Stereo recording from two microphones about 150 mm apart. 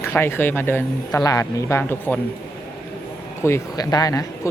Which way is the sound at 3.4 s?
20° left (ahead or behind).